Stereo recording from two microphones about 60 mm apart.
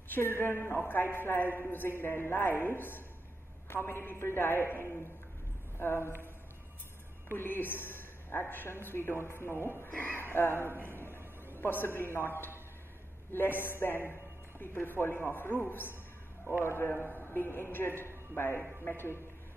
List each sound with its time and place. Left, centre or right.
0.1 s a woman's voice: left
7.3 s a woman's voice: left
9.8 s speech: left
10.1 s a woman's voice: left
16.9 s a woman's voice: left